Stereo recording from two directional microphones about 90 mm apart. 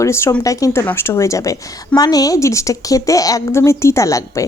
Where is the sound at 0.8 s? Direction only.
25° left (ahead or behind).